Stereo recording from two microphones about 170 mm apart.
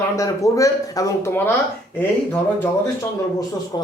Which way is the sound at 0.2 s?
20° left (ahead or behind).